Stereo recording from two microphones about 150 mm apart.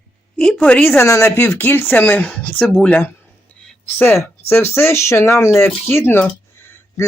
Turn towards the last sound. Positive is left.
turn(degrees=15)  # may be behind; listen again after turning